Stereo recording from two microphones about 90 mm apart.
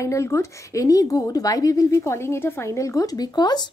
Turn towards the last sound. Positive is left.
turn(degrees=50)  # may be behind; listen again after turning